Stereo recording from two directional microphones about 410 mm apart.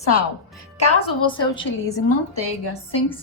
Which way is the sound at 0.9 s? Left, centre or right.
Centre.